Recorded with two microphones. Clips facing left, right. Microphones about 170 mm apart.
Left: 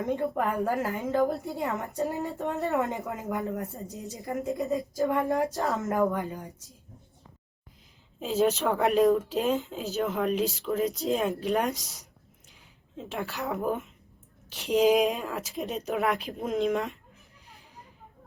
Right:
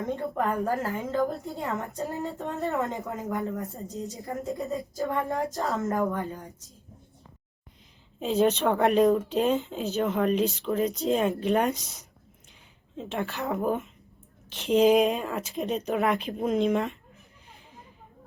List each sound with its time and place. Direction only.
0.0 s a woman's voice: 15° left (ahead or behind)
3.8 s a woman's voice: 20° right (ahead or behind)
4.1 s a woman's voice: 15° left (ahead or behind)
8.2 s speech: centre (ahead or behind)